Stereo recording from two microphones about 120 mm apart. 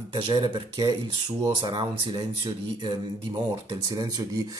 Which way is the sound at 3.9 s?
30° right (ahead or behind).